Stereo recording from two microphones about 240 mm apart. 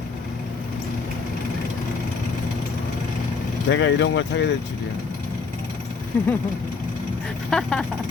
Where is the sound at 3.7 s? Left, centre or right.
Left.